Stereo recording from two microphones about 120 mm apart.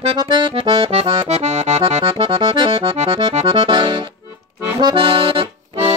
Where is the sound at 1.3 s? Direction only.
70° right (ahead or behind).